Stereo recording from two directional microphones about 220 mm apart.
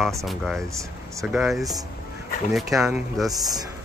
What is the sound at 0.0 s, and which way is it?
Speech, centre (ahead or behind).